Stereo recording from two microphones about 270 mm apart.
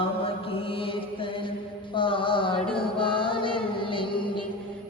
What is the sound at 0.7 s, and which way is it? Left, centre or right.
Mantra, centre.